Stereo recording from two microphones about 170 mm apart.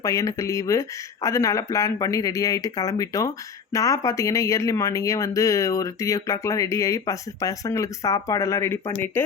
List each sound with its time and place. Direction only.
0.0 s speech: 20° left (ahead or behind)